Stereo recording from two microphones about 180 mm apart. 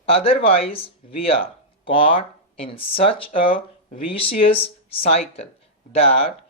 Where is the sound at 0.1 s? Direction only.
30° left (ahead or behind).